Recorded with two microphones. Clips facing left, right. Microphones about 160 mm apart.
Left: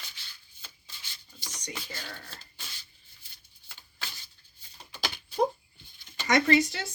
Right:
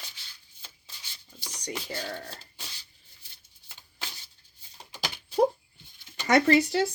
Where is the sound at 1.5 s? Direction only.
35° right (ahead or behind).